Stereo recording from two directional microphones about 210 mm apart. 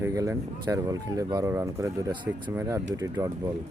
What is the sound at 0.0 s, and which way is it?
Speech, 15° right (ahead or behind).